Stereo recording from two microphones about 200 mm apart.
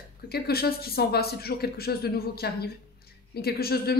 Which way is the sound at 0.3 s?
50° left (ahead or behind).